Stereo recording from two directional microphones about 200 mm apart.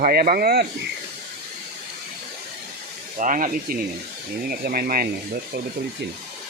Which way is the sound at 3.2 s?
40° right (ahead or behind).